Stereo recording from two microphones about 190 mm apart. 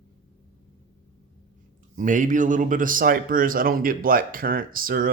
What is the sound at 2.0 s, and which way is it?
Speech, 45° right (ahead or behind).